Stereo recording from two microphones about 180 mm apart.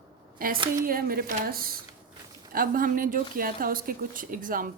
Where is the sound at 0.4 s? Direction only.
50° right (ahead or behind).